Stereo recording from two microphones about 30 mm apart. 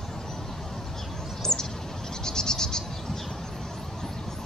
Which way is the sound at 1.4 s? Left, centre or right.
Centre.